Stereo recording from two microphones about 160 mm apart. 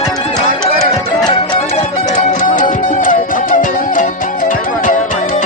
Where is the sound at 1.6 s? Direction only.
50° left (ahead or behind).